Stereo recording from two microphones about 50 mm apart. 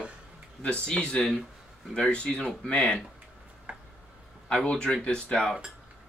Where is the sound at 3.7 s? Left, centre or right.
Right.